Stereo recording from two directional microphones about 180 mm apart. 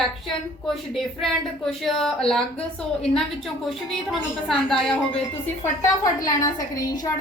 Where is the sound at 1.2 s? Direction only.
Centre (ahead or behind).